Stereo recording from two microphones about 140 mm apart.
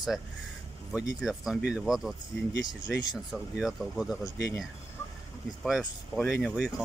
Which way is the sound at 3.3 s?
Centre (ahead or behind).